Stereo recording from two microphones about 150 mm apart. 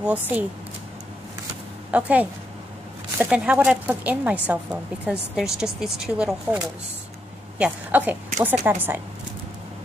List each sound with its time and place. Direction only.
0.0 s a woman's voice: 10° right (ahead or behind)
1.9 s a woman's voice: 10° right (ahead or behind)